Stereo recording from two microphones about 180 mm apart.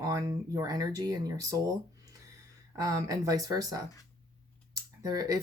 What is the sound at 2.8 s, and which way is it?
Speech, 20° right (ahead or behind).